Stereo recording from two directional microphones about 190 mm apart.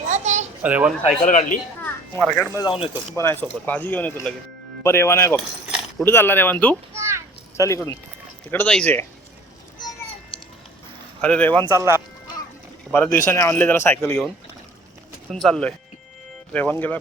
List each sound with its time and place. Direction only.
0.1 s a sound: 40° right (ahead or behind)
0.6 s speech: 5° right (ahead or behind)
1.0 s speech: 40° left (ahead or behind)
1.8 s a sound: 5° left (ahead or behind)
2.6 s speech: 25° left (ahead or behind)
3.2 s a man's voice: 10° left (ahead or behind)
6.9 s children playing: 15° right (ahead or behind)
7.5 s a man's voice: 15° left (ahead or behind)
11.2 s a man's voice: 5° left (ahead or behind)
11.7 s speech: 15° right (ahead or behind)
12.9 s a man's voice: 15° left (ahead or behind)
15.3 s a man's voice: centre (ahead or behind)